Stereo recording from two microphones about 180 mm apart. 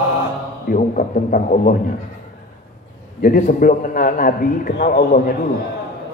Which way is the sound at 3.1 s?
50° left (ahead or behind).